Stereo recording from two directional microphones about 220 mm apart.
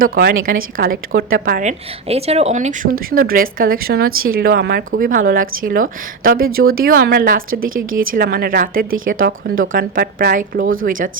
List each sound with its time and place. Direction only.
0.0 s a woman's voice: 40° right (ahead or behind)
2.0 s a woman's voice: 30° right (ahead or behind)